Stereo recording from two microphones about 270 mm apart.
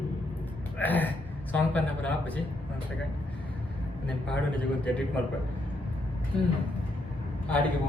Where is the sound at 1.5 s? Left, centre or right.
Centre.